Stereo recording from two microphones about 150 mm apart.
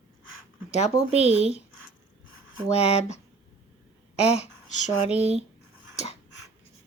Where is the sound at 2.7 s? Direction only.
45° left (ahead or behind).